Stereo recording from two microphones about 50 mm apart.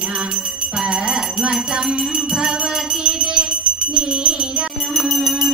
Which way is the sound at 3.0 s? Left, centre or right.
Centre.